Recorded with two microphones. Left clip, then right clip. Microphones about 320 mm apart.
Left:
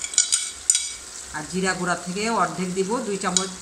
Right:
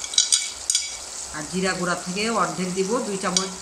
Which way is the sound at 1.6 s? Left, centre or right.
Centre.